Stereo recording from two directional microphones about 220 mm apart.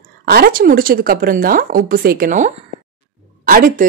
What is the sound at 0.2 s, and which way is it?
A woman's voice, 45° right (ahead or behind).